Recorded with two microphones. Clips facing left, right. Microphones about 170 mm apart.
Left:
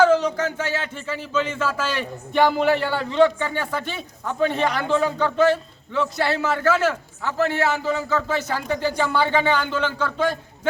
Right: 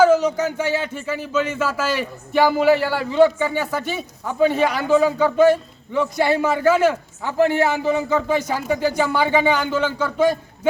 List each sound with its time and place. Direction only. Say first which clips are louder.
0.0 s speech: right 2 dB; 10° right (ahead or behind)